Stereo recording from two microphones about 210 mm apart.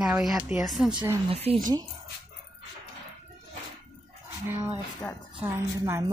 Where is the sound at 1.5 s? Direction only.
30° right (ahead or behind).